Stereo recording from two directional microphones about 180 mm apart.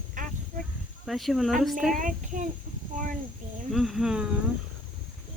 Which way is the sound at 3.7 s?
Centre (ahead or behind).